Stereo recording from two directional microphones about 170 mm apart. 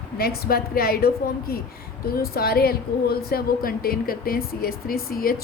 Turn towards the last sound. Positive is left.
turn(degrees=60)  # may be behind; listen again after turning